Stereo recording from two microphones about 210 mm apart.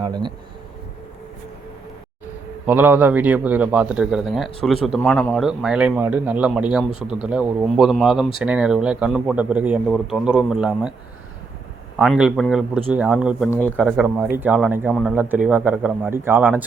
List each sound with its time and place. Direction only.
0.0 s speech: 20° right (ahead or behind)
2.6 s speech: 10° right (ahead or behind)
11.9 s speech: 5° right (ahead or behind)
13.5 s speech: 10° left (ahead or behind)
14.2 s speech: 10° right (ahead or behind)